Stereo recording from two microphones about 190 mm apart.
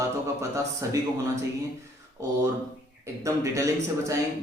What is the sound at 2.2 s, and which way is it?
Speech, 15° right (ahead or behind).